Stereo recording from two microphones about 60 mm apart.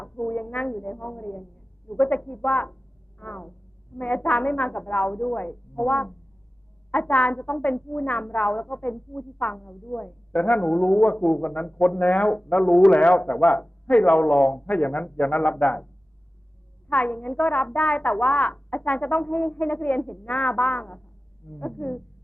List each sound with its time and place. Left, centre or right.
0.0 s speech: left
16.9 s speech: left